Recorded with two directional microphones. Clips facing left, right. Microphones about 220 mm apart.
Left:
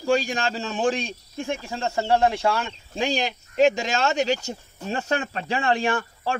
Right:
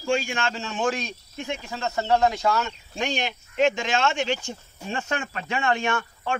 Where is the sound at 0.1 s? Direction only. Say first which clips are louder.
Left 3 dB; 35° left (ahead or behind).